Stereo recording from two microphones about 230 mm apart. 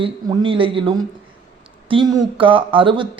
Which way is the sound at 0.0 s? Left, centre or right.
Right.